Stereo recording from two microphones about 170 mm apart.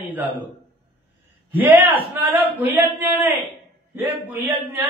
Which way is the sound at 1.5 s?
10° right (ahead or behind).